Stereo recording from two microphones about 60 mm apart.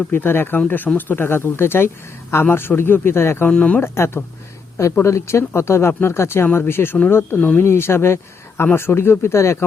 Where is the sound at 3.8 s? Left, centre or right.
Left.